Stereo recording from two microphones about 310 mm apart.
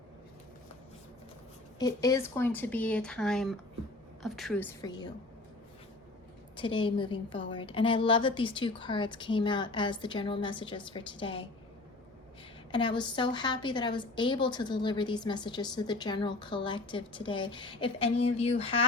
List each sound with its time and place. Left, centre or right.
1.8 s speech: centre
6.6 s a woman's voice: centre
12.7 s a woman's voice: centre